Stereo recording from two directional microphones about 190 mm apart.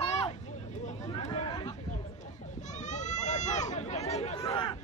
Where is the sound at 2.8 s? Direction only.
40° left (ahead or behind).